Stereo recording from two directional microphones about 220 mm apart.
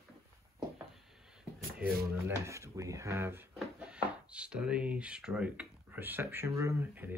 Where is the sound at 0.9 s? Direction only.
Centre (ahead or behind).